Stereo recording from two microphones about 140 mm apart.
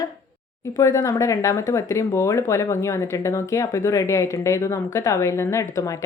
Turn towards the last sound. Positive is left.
turn(degrees=25)  # may be behind; listen again after turning